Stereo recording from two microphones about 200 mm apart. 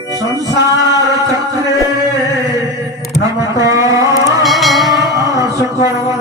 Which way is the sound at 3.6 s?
15° right (ahead or behind).